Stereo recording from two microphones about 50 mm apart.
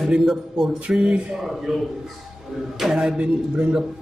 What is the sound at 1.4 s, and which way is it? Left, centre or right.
A man's voice, centre.